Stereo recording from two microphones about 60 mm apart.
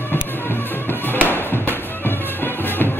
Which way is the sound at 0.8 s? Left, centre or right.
Left.